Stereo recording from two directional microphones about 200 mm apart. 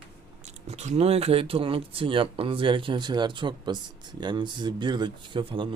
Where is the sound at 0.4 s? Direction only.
35° right (ahead or behind).